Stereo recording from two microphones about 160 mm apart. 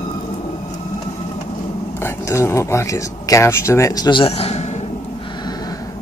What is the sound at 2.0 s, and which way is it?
Speech, 15° left (ahead or behind).